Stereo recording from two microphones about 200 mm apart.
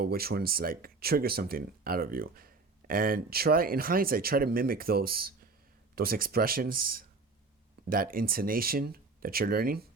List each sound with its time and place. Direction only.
0.0 s speech: 50° right (ahead or behind)